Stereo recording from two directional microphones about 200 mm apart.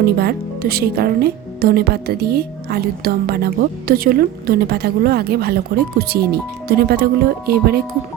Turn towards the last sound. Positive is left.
turn(degrees=-50)  # may be behind; listen again after turning